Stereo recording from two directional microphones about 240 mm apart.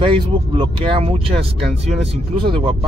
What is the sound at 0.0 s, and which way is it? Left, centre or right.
Speech, right.